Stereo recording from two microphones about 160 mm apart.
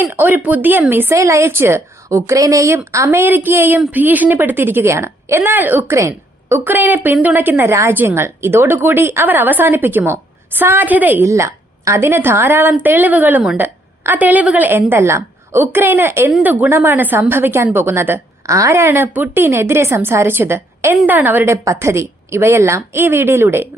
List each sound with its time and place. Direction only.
0.0 s a woman's voice: 10° right (ahead or behind)